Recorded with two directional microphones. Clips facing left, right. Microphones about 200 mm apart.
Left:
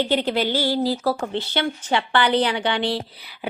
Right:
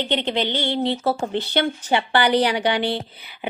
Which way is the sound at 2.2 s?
10° right (ahead or behind).